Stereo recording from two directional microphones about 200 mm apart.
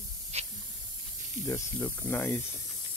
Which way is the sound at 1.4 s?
10° left (ahead or behind).